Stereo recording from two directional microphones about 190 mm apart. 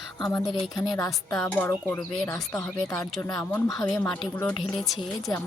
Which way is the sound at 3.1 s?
20° left (ahead or behind).